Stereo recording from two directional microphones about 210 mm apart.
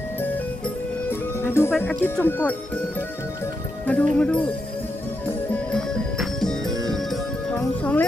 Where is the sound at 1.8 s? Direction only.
10° left (ahead or behind).